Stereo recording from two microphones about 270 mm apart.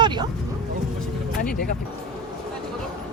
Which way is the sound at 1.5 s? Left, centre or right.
Left.